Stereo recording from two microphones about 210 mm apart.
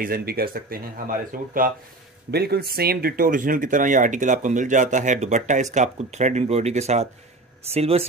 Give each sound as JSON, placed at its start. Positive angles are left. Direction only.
{"t": 0.0, "sound": "speech", "side_deg": -45}